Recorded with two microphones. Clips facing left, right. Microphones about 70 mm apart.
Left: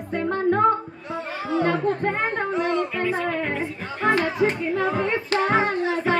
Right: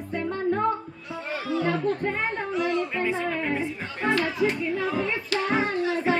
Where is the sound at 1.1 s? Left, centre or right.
Left.